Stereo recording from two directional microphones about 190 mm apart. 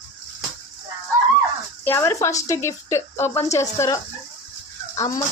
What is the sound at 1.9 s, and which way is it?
A woman's voice, 15° left (ahead or behind).